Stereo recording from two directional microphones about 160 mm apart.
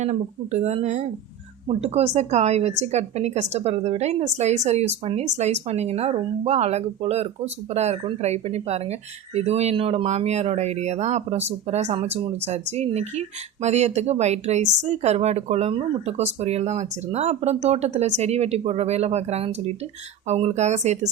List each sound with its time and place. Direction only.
0.0 s a woman's voice: 45° right (ahead or behind)